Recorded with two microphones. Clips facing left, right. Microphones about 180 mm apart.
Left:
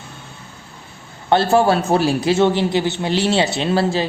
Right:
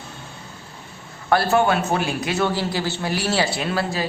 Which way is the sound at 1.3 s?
25° left (ahead or behind).